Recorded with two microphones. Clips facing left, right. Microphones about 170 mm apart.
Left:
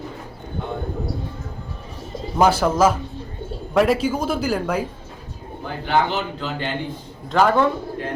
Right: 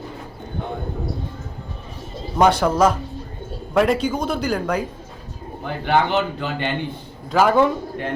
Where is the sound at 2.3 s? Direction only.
Centre (ahead or behind).